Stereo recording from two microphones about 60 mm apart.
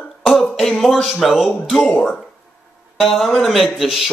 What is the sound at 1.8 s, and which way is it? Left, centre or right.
Speech, centre.